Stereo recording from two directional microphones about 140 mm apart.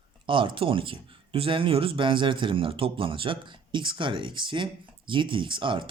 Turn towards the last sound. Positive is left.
turn(degrees=-35)  # may be behind; listen again after turning